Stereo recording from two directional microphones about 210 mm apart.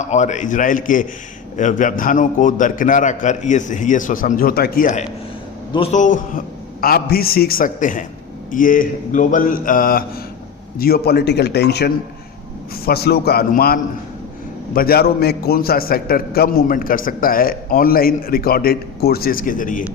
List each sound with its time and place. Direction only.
0.0 s a man's voice: 35° left (ahead or behind)
14.8 s a man's voice: 45° left (ahead or behind)